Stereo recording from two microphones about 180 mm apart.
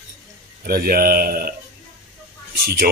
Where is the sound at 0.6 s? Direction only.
55° right (ahead or behind).